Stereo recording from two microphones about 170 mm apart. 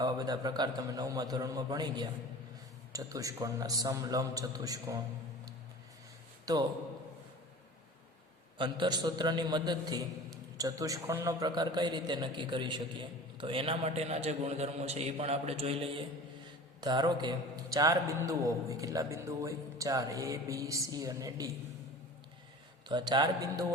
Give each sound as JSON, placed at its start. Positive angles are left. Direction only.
{"t": 0.0, "sound": "a man's voice", "side_deg": -25}
{"t": 6.4, "sound": "a sound", "side_deg": -20}
{"t": 8.5, "sound": "a man's voice", "side_deg": -30}
{"t": 22.9, "sound": "a man's voice", "side_deg": -25}